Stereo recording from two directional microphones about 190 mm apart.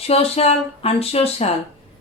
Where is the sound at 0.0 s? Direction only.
30° left (ahead or behind).